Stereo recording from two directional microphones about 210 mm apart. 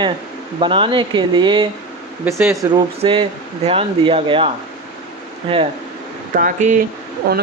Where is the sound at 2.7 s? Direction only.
25° right (ahead or behind).